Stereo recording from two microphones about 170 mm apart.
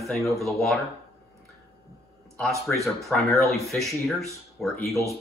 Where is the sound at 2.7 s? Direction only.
Centre (ahead or behind).